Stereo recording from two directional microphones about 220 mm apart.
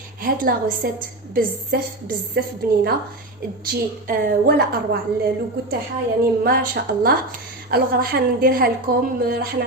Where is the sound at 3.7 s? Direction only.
45° right (ahead or behind).